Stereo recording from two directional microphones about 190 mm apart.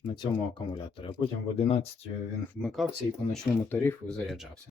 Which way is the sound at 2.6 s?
Centre (ahead or behind).